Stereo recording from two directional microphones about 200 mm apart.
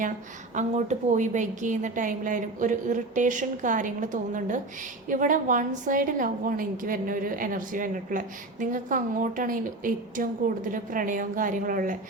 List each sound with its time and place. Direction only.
0.5 s a woman's voice: 35° right (ahead or behind)